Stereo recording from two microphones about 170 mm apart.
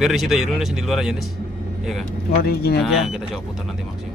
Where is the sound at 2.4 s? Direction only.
65° left (ahead or behind).